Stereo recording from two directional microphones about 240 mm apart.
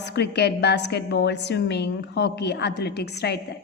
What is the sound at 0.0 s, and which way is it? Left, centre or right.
A woman's voice, left.